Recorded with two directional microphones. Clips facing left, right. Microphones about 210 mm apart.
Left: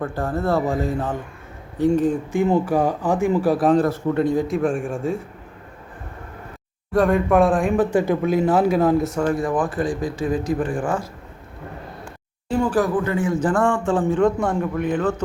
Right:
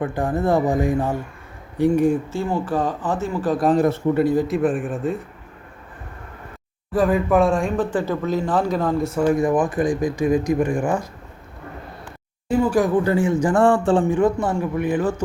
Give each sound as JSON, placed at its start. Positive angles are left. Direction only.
{"t": 0.0, "sound": "speech", "side_deg": -15}
{"t": 2.3, "sound": "speech", "side_deg": 15}
{"t": 4.1, "sound": "a man's voice", "side_deg": -5}
{"t": 6.9, "sound": "a man's voice", "side_deg": -5}
{"t": 7.9, "sound": "speech", "side_deg": 15}
{"t": 9.2, "sound": "speech", "side_deg": -15}
{"t": 12.0, "sound": "a sound", "side_deg": -10}
{"t": 13.1, "sound": "a man's voice", "side_deg": -30}
{"t": 14.1, "sound": "speech", "side_deg": -5}